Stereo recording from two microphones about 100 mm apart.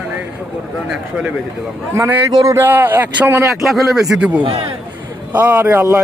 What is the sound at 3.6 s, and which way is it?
Speech, centre (ahead or behind).